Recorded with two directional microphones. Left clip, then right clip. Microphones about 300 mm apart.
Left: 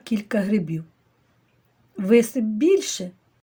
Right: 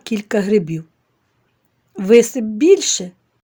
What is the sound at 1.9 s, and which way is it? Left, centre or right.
Speech, right.